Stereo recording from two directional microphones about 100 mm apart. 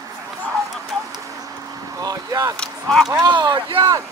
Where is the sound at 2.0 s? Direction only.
40° right (ahead or behind).